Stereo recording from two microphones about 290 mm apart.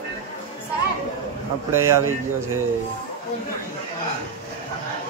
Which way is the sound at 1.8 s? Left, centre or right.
Right.